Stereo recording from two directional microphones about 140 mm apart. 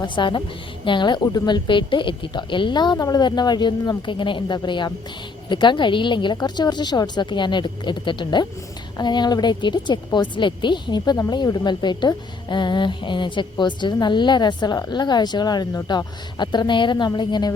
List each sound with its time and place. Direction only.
0.0 s a woman's voice: 35° left (ahead or behind)